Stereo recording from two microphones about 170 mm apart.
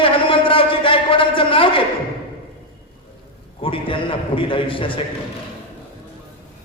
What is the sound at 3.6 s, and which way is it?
A man's voice, 30° left (ahead or behind).